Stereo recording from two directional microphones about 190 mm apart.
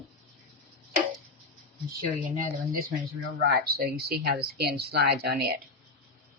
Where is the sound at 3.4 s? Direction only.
55° right (ahead or behind).